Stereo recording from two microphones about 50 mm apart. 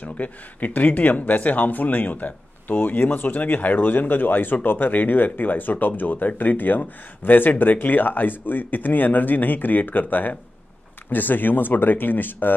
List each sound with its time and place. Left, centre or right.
0.0 s speech: left